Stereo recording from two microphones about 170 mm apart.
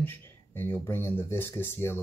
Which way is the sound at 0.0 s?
10° left (ahead or behind).